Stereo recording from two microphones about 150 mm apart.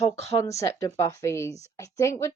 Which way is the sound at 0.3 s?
20° left (ahead or behind).